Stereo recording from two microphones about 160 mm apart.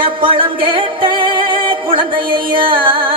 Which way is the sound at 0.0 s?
35° right (ahead or behind).